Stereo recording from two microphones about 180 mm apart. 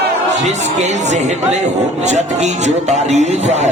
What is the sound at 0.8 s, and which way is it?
Speech, 40° right (ahead or behind).